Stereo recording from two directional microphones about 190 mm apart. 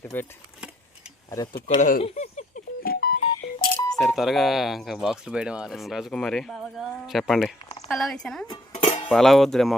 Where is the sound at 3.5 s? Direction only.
20° left (ahead or behind).